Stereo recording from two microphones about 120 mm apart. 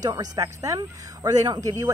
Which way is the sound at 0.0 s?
30° right (ahead or behind).